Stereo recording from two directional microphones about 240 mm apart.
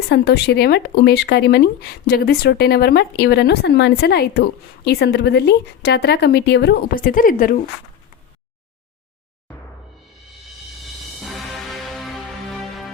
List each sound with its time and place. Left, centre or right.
0.1 s speech: left
11.2 s music: centre